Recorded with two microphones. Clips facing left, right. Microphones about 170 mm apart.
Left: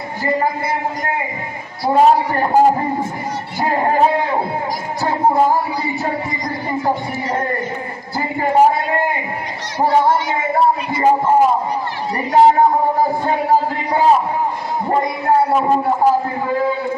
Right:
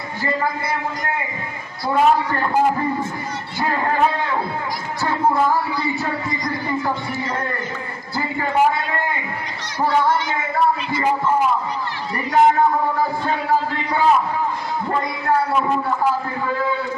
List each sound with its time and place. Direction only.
1.9 s a man's voice: 40° left (ahead or behind)
2.1 s a man's voice: 20° left (ahead or behind)
2.5 s a man's voice: 35° left (ahead or behind)
3.8 s a sound: 35° left (ahead or behind)
5.0 s music: 40° left (ahead or behind)
6.1 s music: 20° left (ahead or behind)
6.8 s a man's voice: 35° left (ahead or behind)
8.1 s a sound: 40° left (ahead or behind)
8.5 s a man's voice: 35° left (ahead or behind)
10.3 s a sound: 30° left (ahead or behind)
13.9 s a sound: 40° left (ahead or behind)
14.8 s a man's voice: 30° left (ahead or behind)